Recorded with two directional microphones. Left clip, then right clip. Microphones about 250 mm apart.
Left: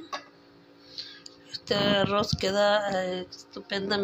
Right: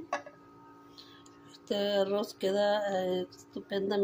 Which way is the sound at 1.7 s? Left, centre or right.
Centre.